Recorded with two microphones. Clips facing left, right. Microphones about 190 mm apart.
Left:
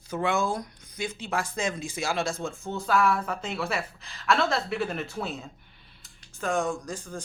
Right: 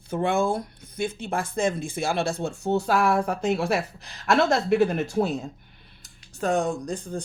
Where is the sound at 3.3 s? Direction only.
45° right (ahead or behind).